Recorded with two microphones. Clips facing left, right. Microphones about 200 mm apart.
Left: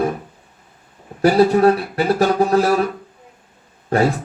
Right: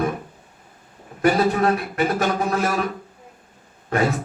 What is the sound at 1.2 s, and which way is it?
A man's voice, 35° left (ahead or behind).